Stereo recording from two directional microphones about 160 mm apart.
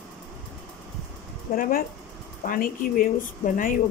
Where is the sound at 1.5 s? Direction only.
65° left (ahead or behind).